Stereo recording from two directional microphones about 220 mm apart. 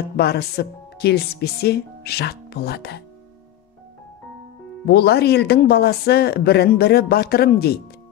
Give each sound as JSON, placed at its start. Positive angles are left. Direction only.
{"t": 0.2, "sound": "speech", "side_deg": 45}
{"t": 4.8, "sound": "speech", "side_deg": 45}